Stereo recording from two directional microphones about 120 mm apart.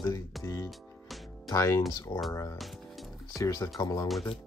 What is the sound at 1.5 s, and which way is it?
Speech, 25° left (ahead or behind).